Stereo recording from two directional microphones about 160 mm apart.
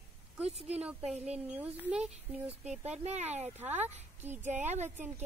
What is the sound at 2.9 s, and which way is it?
Speech, 45° right (ahead or behind).